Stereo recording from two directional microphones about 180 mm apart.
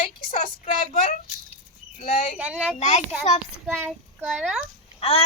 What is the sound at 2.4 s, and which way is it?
A child's voice, 5° right (ahead or behind).